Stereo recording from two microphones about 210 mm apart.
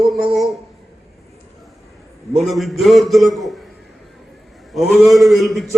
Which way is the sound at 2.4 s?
Centre (ahead or behind).